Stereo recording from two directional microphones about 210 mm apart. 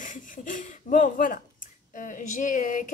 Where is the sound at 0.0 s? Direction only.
40° left (ahead or behind).